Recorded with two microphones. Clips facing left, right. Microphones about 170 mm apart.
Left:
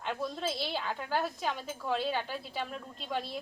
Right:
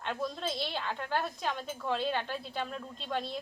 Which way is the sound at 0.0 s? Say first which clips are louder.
Left 1 dB; 5° left (ahead or behind).